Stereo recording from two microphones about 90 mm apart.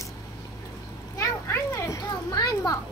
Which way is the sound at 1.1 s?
35° left (ahead or behind).